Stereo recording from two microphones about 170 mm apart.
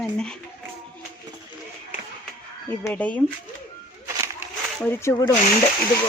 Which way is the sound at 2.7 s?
10° left (ahead or behind).